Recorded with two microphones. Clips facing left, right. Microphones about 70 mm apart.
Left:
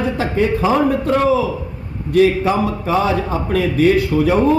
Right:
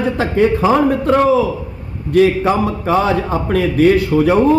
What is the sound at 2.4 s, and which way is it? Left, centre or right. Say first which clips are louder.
Speech: right 2 dB; right.